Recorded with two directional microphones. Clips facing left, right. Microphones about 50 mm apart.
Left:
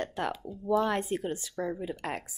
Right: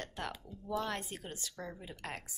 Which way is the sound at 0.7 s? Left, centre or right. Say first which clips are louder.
Left 10 dB; left.